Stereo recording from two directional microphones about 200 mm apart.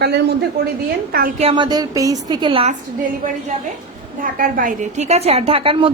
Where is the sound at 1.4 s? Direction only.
25° right (ahead or behind).